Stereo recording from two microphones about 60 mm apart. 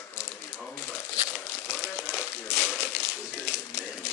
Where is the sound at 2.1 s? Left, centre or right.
Left.